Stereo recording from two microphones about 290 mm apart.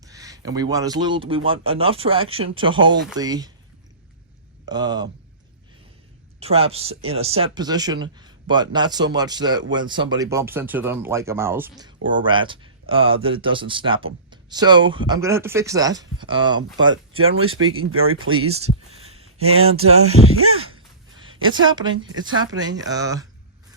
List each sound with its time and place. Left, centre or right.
0.0 s speech: centre
4.6 s speech: centre
6.4 s speech: right
17.2 s speech: right
18.5 s speech: right
19.2 s a sound: right
19.7 s speech: right
20.7 s a sound: centre
21.5 s speech: centre